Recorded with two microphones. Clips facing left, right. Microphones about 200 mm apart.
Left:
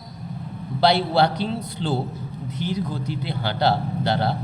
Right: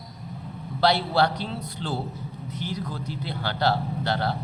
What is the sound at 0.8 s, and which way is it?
A man's voice, 25° left (ahead or behind).